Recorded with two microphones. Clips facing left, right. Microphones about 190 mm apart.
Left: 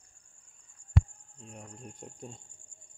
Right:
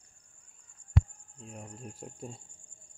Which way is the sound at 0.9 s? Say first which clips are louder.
Left 1 dB; 5° right (ahead or behind).